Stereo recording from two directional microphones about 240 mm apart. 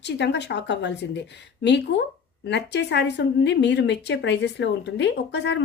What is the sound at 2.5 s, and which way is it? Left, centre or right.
Speech, left.